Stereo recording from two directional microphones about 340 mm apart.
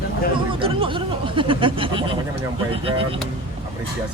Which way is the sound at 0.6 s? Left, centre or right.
Centre.